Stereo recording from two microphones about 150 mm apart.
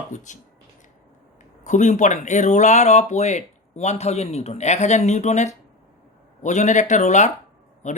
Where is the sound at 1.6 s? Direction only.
55° left (ahead or behind).